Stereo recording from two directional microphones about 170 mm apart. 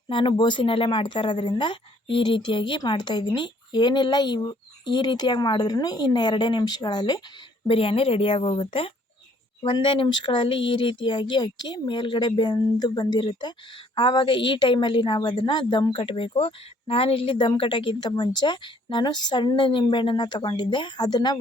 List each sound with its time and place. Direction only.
0.1 s a woman's voice: 30° left (ahead or behind)